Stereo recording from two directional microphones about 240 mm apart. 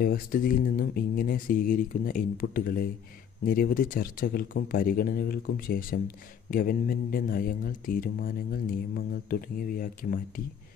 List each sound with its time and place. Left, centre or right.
0.0 s speech: left